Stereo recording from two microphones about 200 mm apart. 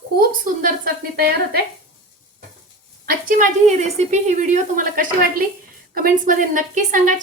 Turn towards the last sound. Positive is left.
turn(degrees=-40)  # may be behind; listen again after turning